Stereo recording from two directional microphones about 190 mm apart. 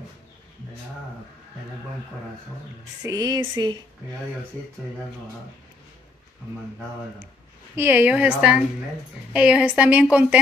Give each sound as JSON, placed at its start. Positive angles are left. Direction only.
{"t": 3.0, "sound": "speech", "side_deg": -20}
{"t": 7.7, "sound": "a woman's voice", "side_deg": -10}